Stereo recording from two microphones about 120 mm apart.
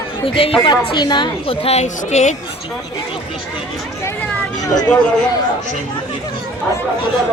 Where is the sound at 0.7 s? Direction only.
40° left (ahead or behind); by 2.4 s 70° left (ahead or behind).